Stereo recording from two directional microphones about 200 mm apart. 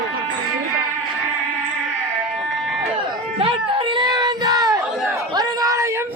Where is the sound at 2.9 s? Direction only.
25° right (ahead or behind).